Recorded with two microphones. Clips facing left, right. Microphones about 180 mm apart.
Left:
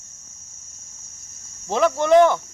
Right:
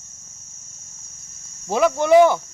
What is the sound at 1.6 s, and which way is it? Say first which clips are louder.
Speech: right 1 dB; 10° right (ahead or behind).